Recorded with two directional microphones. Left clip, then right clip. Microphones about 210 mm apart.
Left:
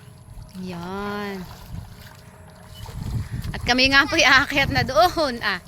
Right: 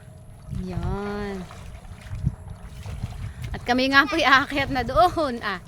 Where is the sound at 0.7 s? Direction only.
5° right (ahead or behind).